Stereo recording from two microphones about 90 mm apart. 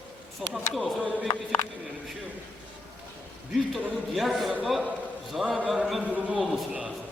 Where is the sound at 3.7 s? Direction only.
Centre (ahead or behind).